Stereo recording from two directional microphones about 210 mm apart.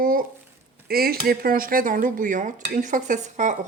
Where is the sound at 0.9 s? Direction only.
45° right (ahead or behind).